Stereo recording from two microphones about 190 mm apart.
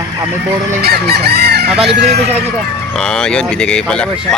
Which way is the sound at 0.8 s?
55° right (ahead or behind).